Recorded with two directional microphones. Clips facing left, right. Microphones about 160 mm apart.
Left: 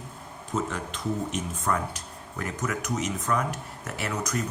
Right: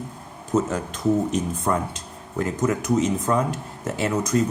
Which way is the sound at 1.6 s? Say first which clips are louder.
Right 4 dB; 25° right (ahead or behind).